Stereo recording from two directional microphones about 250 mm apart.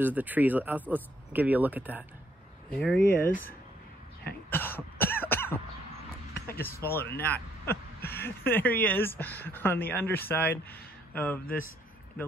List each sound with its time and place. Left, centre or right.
0.0 s speech: centre
4.5 s cough: centre
6.3 s a sound: left
6.9 s speech: centre